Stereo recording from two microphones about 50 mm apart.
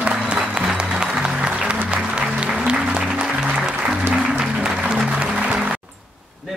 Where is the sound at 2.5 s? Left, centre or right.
Centre.